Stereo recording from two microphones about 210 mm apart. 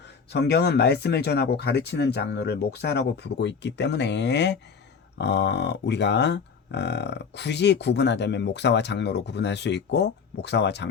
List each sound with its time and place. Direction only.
0.3 s speech: 50° left (ahead or behind)